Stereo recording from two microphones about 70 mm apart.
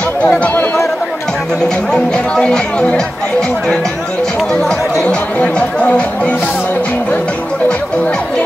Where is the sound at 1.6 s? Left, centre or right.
Centre.